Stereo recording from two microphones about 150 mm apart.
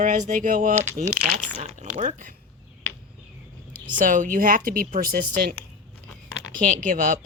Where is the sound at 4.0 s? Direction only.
60° right (ahead or behind).